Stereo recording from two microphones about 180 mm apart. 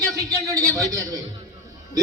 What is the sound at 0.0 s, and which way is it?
A man's voice, 20° right (ahead or behind).